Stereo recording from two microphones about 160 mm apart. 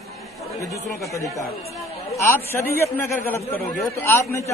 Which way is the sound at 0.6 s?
20° left (ahead or behind).